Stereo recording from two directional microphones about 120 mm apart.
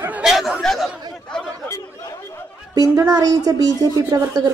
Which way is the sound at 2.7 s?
30° right (ahead or behind).